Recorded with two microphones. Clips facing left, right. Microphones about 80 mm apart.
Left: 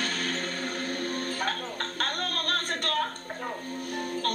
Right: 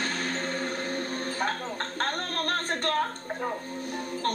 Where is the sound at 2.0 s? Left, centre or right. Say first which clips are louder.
Right 2 dB; right.